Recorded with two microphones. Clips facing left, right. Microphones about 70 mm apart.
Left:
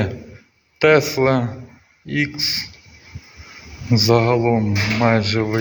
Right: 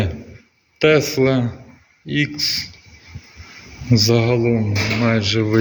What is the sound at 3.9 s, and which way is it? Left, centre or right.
A man's voice, left.